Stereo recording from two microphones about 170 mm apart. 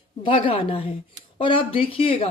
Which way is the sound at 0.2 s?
30° left (ahead or behind).